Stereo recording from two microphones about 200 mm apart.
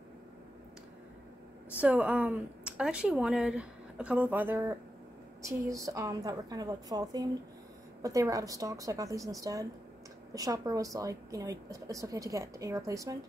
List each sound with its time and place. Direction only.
1.8 s speech: 5° right (ahead or behind)